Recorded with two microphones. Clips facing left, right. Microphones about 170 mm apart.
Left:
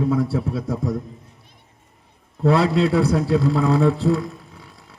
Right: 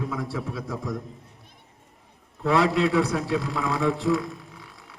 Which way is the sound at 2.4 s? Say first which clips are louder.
Left 4 dB; 40° left (ahead or behind).